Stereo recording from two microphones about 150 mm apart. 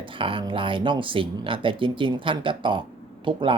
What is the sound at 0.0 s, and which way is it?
Speech, 35° right (ahead or behind).